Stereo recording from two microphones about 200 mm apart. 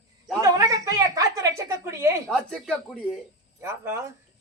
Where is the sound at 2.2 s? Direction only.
5° left (ahead or behind).